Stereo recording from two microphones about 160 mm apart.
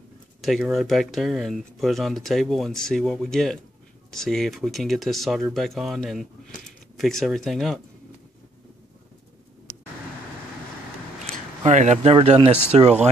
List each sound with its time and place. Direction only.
0.4 s speech: centre (ahead or behind)
11.6 s speech: 45° right (ahead or behind)